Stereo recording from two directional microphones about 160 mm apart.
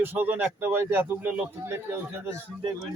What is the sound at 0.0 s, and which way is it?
Speech, 10° right (ahead or behind).